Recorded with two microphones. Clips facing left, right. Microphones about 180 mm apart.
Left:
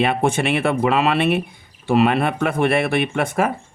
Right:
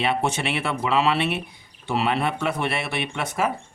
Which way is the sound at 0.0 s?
55° left (ahead or behind).